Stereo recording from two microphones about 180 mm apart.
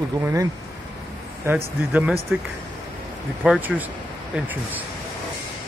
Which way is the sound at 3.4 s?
10° right (ahead or behind).